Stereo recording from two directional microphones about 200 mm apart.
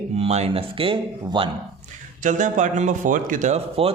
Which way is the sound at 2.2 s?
40° right (ahead or behind).